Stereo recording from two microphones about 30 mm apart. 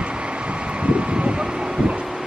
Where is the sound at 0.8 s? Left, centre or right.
Right.